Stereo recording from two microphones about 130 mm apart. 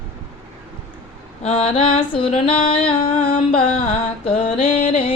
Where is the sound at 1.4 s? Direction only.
50° left (ahead or behind).